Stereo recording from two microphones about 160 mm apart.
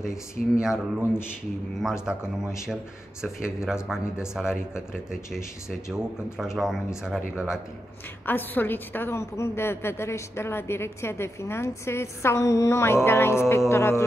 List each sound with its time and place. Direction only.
0.0 s speech: 5° right (ahead or behind)
8.3 s a woman's voice: 10° left (ahead or behind)